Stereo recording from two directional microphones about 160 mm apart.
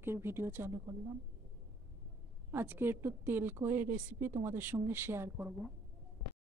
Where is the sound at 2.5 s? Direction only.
15° right (ahead or behind).